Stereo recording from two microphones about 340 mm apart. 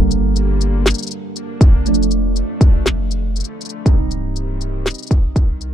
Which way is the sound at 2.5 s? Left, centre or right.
Centre.